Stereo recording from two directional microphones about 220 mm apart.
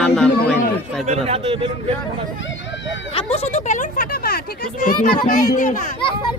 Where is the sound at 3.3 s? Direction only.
30° left (ahead or behind).